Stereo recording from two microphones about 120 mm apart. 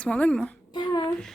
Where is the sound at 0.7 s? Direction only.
40° left (ahead or behind).